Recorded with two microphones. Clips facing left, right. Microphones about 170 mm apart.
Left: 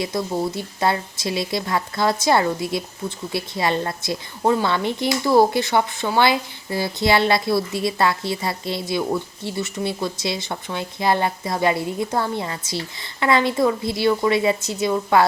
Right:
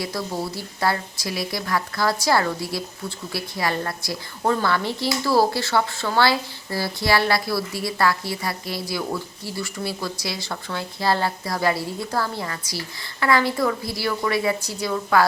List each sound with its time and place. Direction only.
0.0 s speech: 20° left (ahead or behind)